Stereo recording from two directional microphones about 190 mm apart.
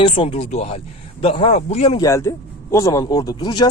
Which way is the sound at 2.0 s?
15° left (ahead or behind).